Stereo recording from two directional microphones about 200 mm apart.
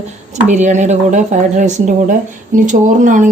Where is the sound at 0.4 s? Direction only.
35° right (ahead or behind).